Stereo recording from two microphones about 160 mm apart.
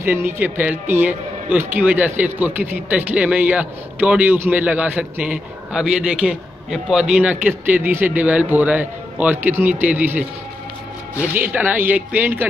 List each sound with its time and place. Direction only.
0.0 s a man's voice: 15° right (ahead or behind)
11.5 s a man's voice: 10° right (ahead or behind)